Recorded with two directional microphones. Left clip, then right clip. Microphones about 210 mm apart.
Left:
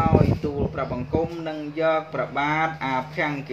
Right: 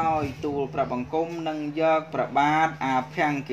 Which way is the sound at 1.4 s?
35° right (ahead or behind).